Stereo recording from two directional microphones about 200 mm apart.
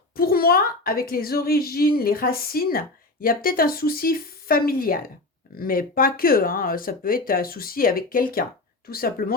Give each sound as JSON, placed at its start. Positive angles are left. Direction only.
{"t": 0.2, "sound": "a woman's voice", "side_deg": 50}